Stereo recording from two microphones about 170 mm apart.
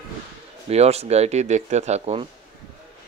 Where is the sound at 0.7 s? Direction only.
40° right (ahead or behind).